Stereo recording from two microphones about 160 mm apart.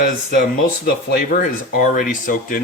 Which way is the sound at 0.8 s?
75° left (ahead or behind).